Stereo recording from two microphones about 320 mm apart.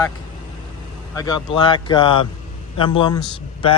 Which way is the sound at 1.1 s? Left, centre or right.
Centre.